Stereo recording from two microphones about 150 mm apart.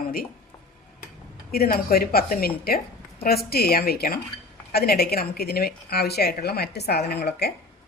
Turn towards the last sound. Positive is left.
turn(degrees=90)